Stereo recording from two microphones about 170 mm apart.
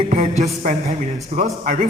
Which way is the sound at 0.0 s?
40° right (ahead or behind).